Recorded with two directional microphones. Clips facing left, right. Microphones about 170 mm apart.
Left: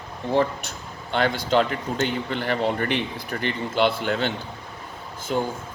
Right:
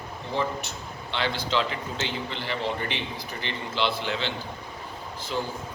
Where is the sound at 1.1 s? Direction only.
50° left (ahead or behind).